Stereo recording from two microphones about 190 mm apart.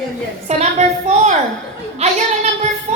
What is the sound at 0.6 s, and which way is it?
Speech, 35° right (ahead or behind).